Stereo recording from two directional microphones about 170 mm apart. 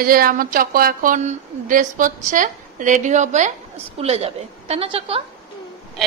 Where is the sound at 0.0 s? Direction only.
60° right (ahead or behind); by 5.2 s 35° right (ahead or behind).